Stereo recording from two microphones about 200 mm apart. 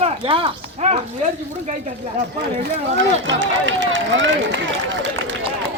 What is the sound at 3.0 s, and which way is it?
Speech, 65° right (ahead or behind).